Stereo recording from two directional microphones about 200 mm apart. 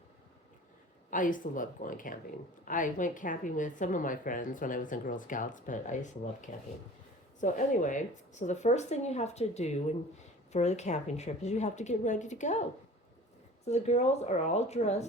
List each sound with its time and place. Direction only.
1.1 s speech: 40° left (ahead or behind)
13.7 s speech: 35° left (ahead or behind)